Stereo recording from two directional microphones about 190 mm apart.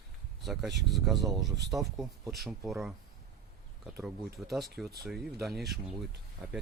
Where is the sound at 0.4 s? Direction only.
Centre (ahead or behind).